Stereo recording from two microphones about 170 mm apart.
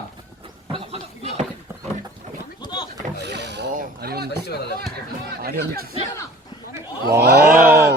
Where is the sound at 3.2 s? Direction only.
85° right.